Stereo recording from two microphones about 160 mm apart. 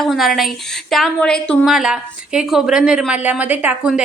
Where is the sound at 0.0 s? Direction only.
Centre (ahead or behind).